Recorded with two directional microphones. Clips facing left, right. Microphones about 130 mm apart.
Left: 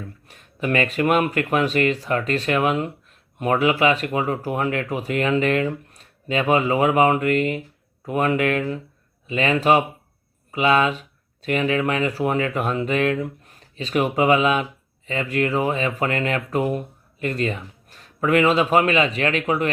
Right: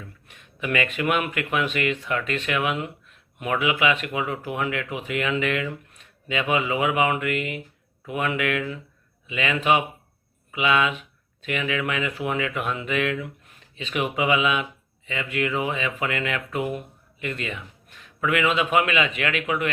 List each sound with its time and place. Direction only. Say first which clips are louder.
0.3 s speech: left 4 dB; 40° left (ahead or behind)